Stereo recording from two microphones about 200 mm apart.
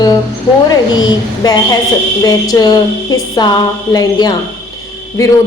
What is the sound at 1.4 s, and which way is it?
A man's voice, 20° left (ahead or behind).